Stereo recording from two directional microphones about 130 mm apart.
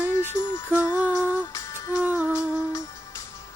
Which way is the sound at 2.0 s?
10° right (ahead or behind).